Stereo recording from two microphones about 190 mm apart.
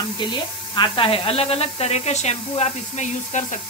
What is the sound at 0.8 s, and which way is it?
Speech, 30° left (ahead or behind).